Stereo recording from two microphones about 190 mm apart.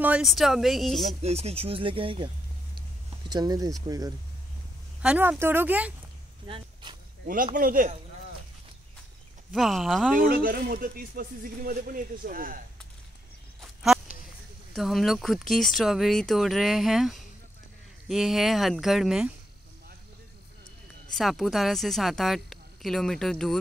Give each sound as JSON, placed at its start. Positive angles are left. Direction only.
{"t": 0.0, "sound": "speech", "side_deg": -5}
{"t": 1.2, "sound": "speech", "side_deg": -35}
{"t": 5.0, "sound": "speech", "side_deg": -5}
{"t": 6.4, "sound": "speech", "side_deg": -25}
{"t": 7.5, "sound": "speech", "side_deg": -45}
{"t": 9.5, "sound": "speech", "side_deg": 0}
{"t": 10.1, "sound": "speech", "side_deg": -50}
{"t": 13.6, "sound": "a sound", "side_deg": 0}
{"t": 14.7, "sound": "speech", "side_deg": 0}
{"t": 21.1, "sound": "speech", "side_deg": 0}